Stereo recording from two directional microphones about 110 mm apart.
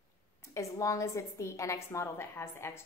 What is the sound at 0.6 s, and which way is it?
A woman's voice, 30° left (ahead or behind).